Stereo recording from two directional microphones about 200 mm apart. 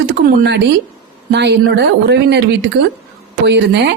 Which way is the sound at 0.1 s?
55° right (ahead or behind).